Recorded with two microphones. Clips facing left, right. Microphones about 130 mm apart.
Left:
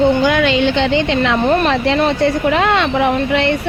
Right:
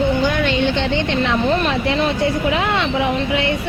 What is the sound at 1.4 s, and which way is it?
A woman's voice, 55° left (ahead or behind).